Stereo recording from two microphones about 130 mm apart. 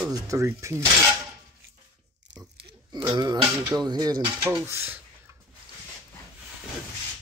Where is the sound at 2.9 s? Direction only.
35° right (ahead or behind).